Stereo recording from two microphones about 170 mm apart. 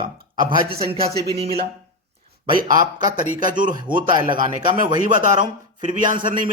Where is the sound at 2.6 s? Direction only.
50° right (ahead or behind).